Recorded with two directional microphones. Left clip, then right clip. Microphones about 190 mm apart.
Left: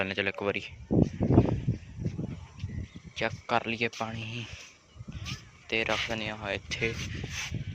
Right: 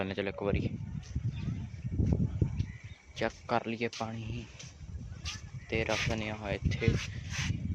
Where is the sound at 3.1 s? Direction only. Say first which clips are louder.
Left 3 dB; 15° right (ahead or behind).